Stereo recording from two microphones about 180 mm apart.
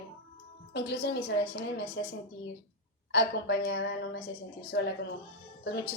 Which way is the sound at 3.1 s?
70° left (ahead or behind).